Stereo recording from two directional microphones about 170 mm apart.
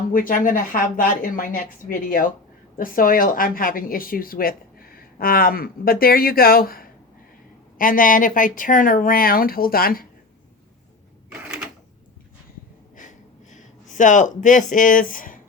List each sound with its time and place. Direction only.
0.1 s a woman's voice: 55° left (ahead or behind)
11.3 s cash register: 5° right (ahead or behind)
13.0 s a sound: 45° left (ahead or behind)